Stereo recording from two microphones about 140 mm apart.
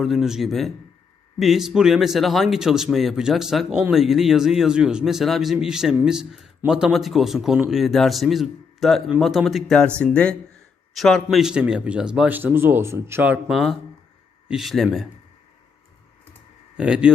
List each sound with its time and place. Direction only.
0.0 s speech: centre (ahead or behind)
12.4 s speech: 15° right (ahead or behind); by 15.0 s centre (ahead or behind)
16.7 s speech: 5° right (ahead or behind)